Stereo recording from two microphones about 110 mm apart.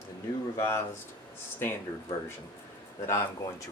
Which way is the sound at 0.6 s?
25° left (ahead or behind).